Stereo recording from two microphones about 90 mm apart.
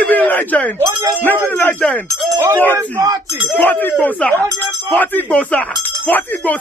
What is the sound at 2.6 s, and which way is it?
A man's voice, 20° left (ahead or behind).